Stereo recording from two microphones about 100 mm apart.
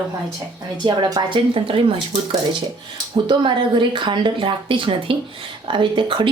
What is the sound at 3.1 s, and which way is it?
Speech, 50° right (ahead or behind).